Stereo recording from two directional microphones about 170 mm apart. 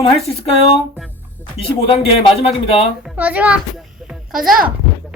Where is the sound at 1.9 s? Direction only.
35° left (ahead or behind).